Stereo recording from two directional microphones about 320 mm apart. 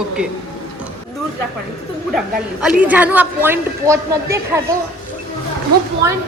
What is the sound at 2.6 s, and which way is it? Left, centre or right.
A woman's voice, centre.